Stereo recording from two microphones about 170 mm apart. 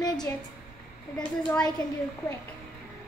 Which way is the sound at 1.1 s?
5° left (ahead or behind).